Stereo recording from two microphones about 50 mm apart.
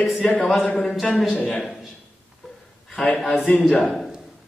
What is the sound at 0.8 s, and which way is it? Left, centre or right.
Speech, centre.